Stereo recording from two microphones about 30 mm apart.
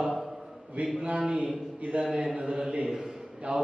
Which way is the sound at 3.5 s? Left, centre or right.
Right.